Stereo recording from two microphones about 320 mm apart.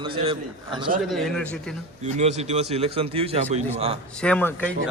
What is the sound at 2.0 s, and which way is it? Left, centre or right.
A man's voice, right.